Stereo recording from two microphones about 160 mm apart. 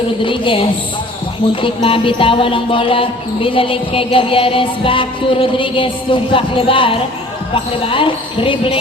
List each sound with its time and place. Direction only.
0.2 s music: 30° left (ahead or behind)
1.6 s music: 35° left (ahead or behind)